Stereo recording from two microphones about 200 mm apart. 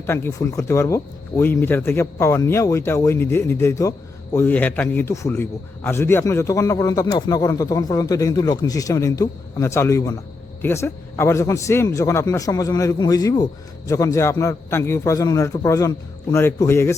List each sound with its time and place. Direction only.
0.0 s a man's voice: 15° left (ahead or behind)